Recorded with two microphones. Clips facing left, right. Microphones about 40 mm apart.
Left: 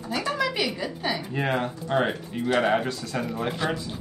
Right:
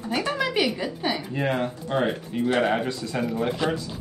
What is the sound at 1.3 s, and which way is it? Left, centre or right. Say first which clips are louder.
Speech: right 1 dB; centre.